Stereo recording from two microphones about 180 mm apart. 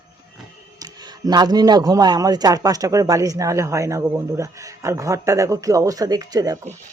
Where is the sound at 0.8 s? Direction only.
20° right (ahead or behind).